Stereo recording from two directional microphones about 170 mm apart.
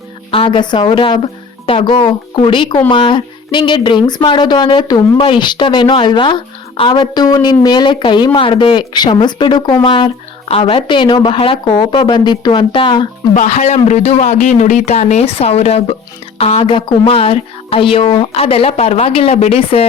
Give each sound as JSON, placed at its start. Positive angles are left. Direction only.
{"t": 0.3, "sound": "a woman's voice", "side_deg": 30}
{"t": 13.3, "sound": "a woman's voice", "side_deg": 45}